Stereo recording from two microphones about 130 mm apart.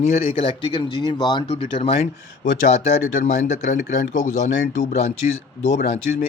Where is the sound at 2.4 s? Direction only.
70° left (ahead or behind).